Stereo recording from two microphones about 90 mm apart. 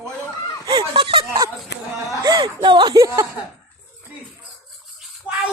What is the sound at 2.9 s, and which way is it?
Speech, 35° right (ahead or behind).